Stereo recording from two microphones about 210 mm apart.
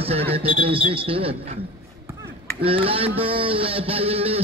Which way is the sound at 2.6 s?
25° right (ahead or behind).